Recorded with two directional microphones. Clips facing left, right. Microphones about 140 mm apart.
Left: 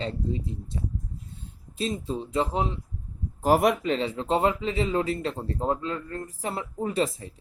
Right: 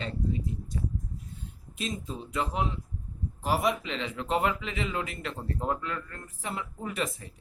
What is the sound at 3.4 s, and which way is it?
Speech, 50° left (ahead or behind).